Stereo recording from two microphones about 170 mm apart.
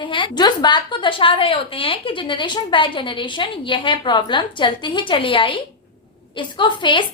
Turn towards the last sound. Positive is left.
turn(degrees=30)  # may be behind; listen again after turning